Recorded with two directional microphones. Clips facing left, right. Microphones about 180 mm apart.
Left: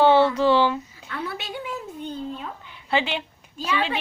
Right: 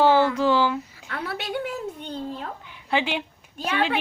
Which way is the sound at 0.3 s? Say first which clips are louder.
Left 2 dB; 10° right (ahead or behind).